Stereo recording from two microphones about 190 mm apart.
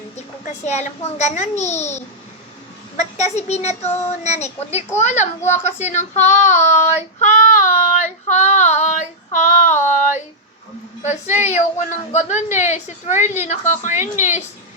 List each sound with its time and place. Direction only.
0.4 s a child's voice: 35° left (ahead or behind)
3.0 s a child's voice: 35° left (ahead or behind)
7.2 s child singing: 40° left (ahead or behind)
11.0 s a child's voice: 40° left (ahead or behind)